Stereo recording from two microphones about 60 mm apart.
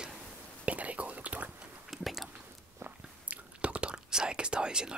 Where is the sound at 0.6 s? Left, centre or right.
Right.